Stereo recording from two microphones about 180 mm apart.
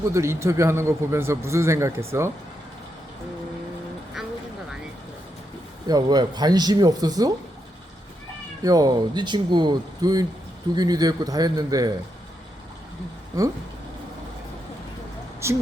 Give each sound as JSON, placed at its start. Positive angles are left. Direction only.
{"t": 0.0, "sound": "a man's voice", "side_deg": -15}
{"t": 5.9, "sound": "speech", "side_deg": -25}
{"t": 8.6, "sound": "speech", "side_deg": -20}
{"t": 13.3, "sound": "speech", "side_deg": -20}
{"t": 15.4, "sound": "a man's voice", "side_deg": -15}